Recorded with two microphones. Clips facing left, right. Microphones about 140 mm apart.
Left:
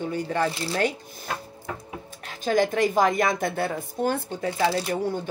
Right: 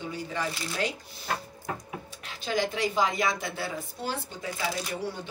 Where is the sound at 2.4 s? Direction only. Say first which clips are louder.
Left 7 dB; 50° left (ahead or behind).